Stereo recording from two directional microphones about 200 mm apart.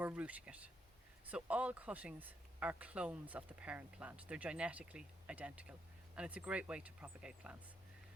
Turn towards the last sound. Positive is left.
turn(degrees=-5)  # may be behind; listen again after turning